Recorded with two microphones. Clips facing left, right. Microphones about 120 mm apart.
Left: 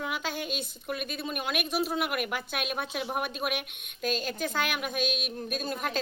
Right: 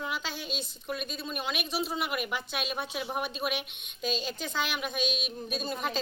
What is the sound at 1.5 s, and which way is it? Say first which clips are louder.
Speech: left 3 dB; 50° left (ahead or behind).